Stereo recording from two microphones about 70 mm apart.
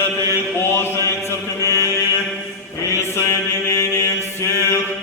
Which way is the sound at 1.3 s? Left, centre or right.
Left.